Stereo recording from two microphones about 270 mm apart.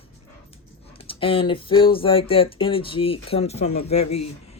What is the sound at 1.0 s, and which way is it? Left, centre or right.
Speech, centre.